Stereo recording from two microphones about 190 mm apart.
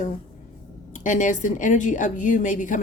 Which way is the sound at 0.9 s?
40° left (ahead or behind).